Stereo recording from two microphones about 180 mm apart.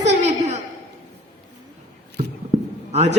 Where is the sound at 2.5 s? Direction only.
40° right (ahead or behind).